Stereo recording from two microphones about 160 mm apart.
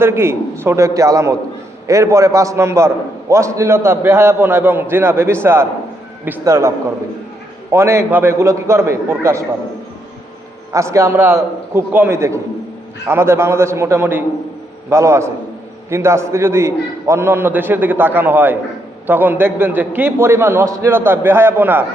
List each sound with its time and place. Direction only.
0.0 s a man's voice: 15° right (ahead or behind)
10.7 s a man's voice: 20° right (ahead or behind)